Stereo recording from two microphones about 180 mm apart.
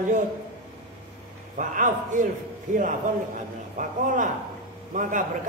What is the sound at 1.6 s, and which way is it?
A man's voice, 45° right (ahead or behind).